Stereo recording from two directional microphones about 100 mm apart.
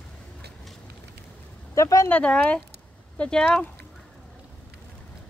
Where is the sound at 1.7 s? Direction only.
30° left (ahead or behind).